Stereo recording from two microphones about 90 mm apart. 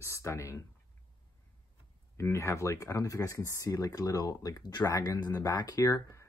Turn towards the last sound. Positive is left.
turn(degrees=35)  # may be behind; listen again after turning